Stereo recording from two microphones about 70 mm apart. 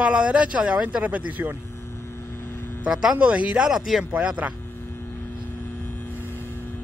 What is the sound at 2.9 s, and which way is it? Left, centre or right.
Speech, centre.